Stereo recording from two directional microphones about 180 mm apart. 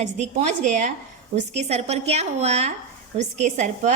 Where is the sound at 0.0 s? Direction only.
40° right (ahead or behind).